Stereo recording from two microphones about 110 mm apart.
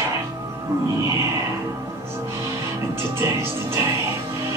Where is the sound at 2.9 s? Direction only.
25° right (ahead or behind).